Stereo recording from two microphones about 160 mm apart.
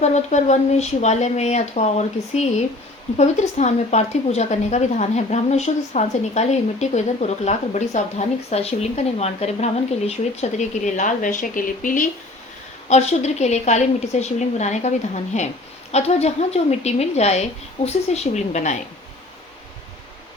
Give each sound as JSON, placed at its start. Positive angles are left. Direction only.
{"t": 0.0, "sound": "a woman's voice", "side_deg": 45}
{"t": 12.9, "sound": "a woman's voice", "side_deg": 45}